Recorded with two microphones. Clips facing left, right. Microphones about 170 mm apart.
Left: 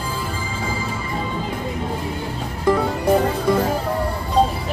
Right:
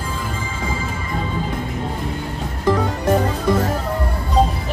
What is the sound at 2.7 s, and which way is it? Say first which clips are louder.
Music: left 1 dB; 10° left (ahead or behind).